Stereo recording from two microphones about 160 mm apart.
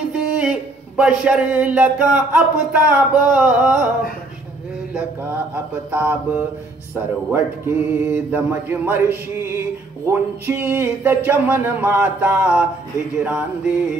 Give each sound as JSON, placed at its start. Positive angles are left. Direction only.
{"t": 0.1, "sound": "a man's voice", "side_deg": -5}
{"t": 5.9, "sound": "speech", "side_deg": -10}